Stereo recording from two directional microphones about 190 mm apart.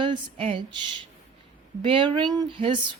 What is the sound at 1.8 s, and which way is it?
Speech, 25° right (ahead or behind).